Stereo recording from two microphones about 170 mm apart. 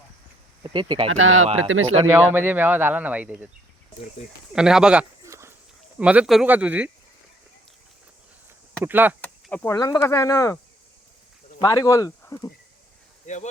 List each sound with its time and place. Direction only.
0.6 s speech: 30° right (ahead or behind)
2.1 s speech: 15° right (ahead or behind)
4.5 s speech: 5° right (ahead or behind)
5.2 s a sound: 15° right (ahead or behind)
6.0 s speech: 10° right (ahead or behind)
8.8 s speech: 10° right (ahead or behind)
9.2 s speech: 10° left (ahead or behind)
11.6 s speech: 20° left (ahead or behind)
13.2 s speech: 45° left (ahead or behind)